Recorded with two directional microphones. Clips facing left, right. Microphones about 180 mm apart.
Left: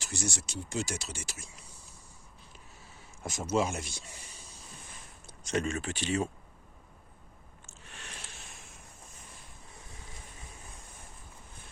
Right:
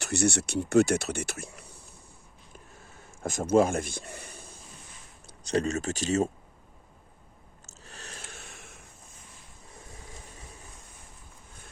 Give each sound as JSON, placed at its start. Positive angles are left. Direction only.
{"t": 0.0, "sound": "speech", "side_deg": -65}
{"t": 3.0, "sound": "speech", "side_deg": -50}
{"t": 5.5, "sound": "speech", "side_deg": -35}
{"t": 7.7, "sound": "a sound", "side_deg": -40}